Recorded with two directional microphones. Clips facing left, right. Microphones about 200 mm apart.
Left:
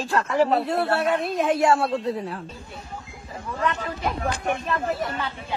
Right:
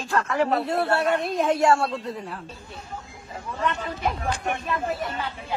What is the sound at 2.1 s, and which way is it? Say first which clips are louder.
Speech: left 4 dB; 35° left (ahead or behind).